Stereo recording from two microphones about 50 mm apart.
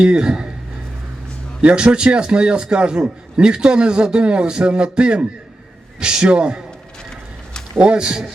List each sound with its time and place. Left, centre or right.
0.0 s a man's voice: centre
1.6 s a man's voice: right
7.8 s a man's voice: centre